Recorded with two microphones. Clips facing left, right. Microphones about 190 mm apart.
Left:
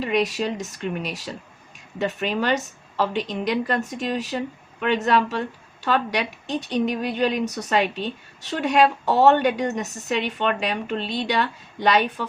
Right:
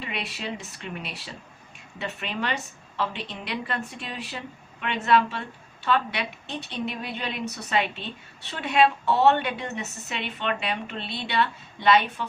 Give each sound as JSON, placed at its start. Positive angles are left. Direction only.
{"t": 0.0, "sound": "a woman's voice", "side_deg": 45}